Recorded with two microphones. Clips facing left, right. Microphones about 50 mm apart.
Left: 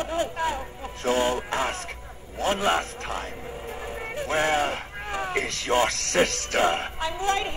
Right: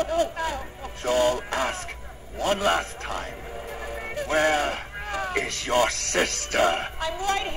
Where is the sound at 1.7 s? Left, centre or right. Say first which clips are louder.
Even; centre.